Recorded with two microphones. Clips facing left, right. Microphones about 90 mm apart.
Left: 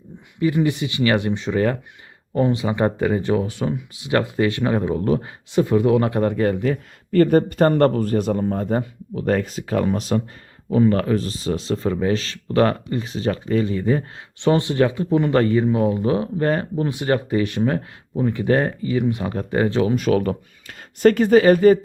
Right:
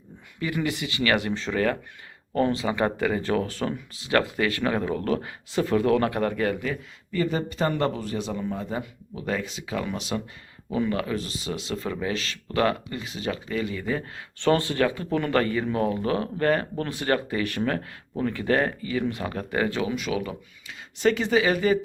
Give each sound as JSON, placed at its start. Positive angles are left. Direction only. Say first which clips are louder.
{"t": 0.3, "sound": "speech", "louder": "left 8 dB", "side_deg": 25}
{"t": 14.3, "sound": "speech", "louder": "left 4 dB", "side_deg": 20}